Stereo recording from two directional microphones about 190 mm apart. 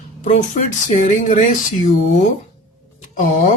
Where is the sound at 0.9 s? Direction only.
40° left (ahead or behind).